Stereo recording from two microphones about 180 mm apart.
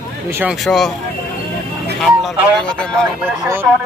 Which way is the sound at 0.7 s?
Centre (ahead or behind).